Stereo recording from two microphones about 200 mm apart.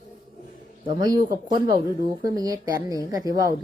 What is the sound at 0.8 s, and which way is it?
A woman's voice, 20° right (ahead or behind).